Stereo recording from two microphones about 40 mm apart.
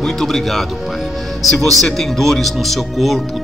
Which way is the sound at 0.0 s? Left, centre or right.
Centre.